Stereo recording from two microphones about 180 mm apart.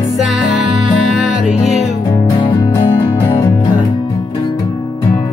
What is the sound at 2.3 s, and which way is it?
Music, 20° left (ahead or behind).